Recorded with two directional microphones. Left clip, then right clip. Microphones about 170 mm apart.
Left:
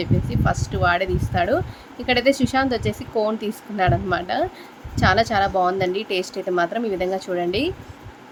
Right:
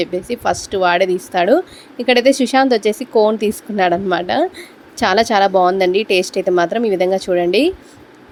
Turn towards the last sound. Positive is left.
turn(degrees=-40)  # may be behind; listen again after turning